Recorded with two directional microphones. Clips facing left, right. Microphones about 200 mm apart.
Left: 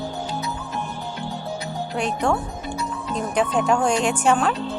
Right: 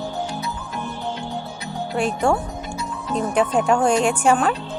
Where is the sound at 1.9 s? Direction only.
5° right (ahead or behind).